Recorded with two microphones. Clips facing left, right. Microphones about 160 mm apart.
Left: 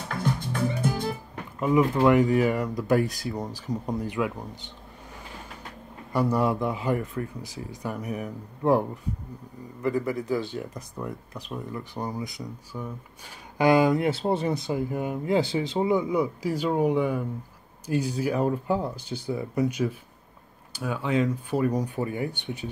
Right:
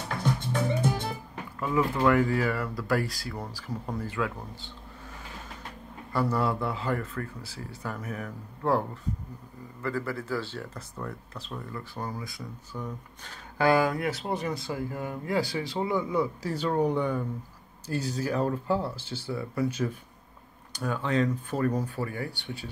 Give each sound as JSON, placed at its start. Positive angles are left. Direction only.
{"t": 1.6, "sound": "speech", "side_deg": 20}
{"t": 6.1, "sound": "speech", "side_deg": 15}